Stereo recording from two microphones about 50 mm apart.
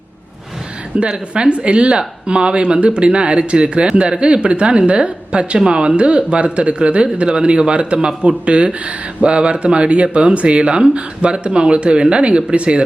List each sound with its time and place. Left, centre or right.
0.9 s speech: centre